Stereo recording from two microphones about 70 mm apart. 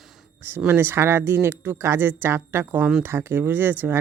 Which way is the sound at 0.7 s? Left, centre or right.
Right.